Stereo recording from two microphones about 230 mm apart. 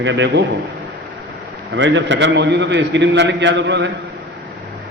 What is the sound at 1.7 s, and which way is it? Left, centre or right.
A man's voice, right.